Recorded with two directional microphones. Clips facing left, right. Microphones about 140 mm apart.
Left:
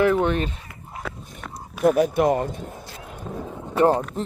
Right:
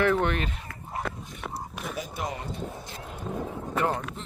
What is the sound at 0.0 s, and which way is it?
Speech, 10° left (ahead or behind).